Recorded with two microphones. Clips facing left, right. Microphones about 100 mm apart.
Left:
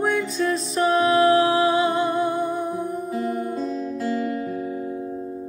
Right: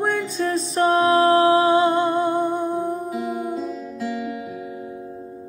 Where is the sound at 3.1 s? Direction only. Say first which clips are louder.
Even; 5° right (ahead or behind).